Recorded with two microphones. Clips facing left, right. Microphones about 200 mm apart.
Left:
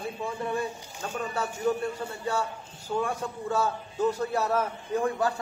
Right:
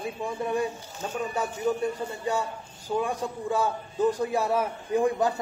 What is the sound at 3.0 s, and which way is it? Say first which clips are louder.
A man's voice: right 1 dB; 15° right (ahead or behind).